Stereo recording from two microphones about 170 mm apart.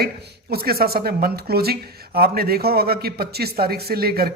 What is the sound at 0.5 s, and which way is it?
Speech, 65° right (ahead or behind).